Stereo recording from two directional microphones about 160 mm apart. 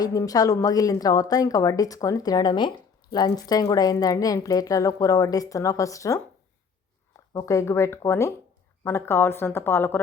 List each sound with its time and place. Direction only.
0.0 s a woman's voice: 20° left (ahead or behind)
7.3 s speech: 20° left (ahead or behind)